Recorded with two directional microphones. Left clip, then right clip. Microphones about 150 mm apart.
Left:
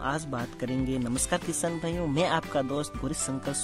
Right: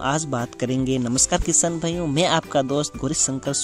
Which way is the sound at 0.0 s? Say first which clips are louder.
Right 8 dB; 40° right (ahead or behind).